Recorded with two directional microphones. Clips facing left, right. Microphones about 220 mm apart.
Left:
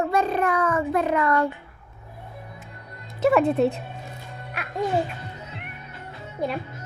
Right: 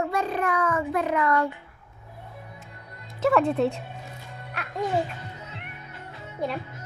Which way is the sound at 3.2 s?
5° left (ahead or behind).